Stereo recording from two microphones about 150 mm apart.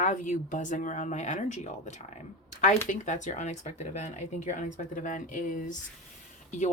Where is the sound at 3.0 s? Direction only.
55° left (ahead or behind).